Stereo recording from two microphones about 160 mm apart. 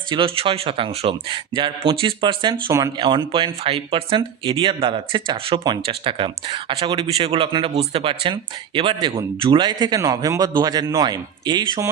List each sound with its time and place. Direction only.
0.1 s a man's voice: 35° right (ahead or behind)